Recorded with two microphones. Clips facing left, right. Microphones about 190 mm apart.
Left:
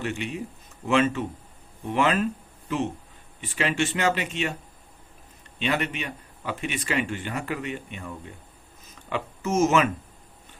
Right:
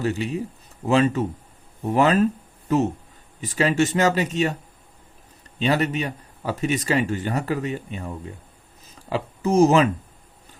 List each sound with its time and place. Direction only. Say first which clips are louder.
0.0 s speech: right 6 dB; 35° right (ahead or behind)
5.5 s speech: right 5 dB; 35° right (ahead or behind)